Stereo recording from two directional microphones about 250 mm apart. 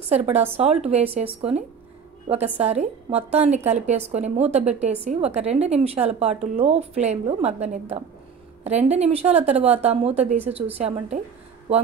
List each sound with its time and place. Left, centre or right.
0.1 s a woman's voice: right